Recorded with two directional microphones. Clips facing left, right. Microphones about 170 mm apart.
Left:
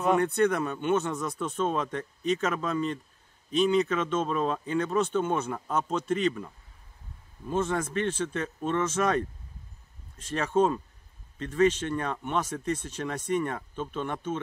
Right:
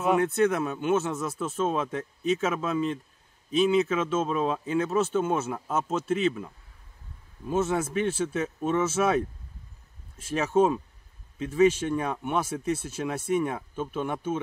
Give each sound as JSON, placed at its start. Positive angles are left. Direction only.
{"t": 0.0, "sound": "speech", "side_deg": -5}